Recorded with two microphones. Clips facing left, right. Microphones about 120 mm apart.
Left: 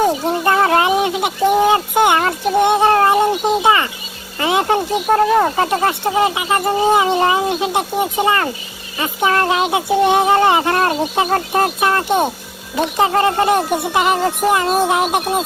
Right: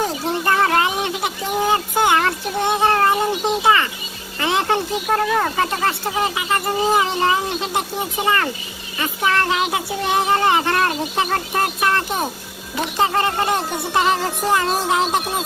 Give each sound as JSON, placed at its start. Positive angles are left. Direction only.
{"t": 0.0, "sound": "a sound", "side_deg": 25}
{"t": 2.6, "sound": "speech", "side_deg": 20}
{"t": 13.1, "sound": "music", "side_deg": 20}